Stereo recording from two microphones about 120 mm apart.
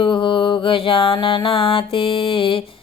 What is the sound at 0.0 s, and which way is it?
Music, 45° left (ahead or behind).